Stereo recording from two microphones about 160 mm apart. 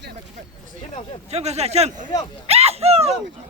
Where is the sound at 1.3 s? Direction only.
40° right (ahead or behind).